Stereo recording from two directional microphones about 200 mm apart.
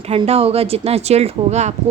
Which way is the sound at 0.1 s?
30° right (ahead or behind).